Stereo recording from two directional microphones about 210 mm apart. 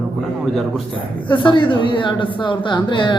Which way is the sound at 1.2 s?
25° left (ahead or behind).